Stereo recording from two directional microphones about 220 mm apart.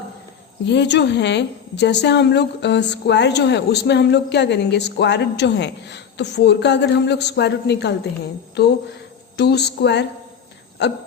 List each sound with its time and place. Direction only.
0.7 s a woman's voice: 50° left (ahead or behind)
9.4 s a woman's voice: 50° left (ahead or behind)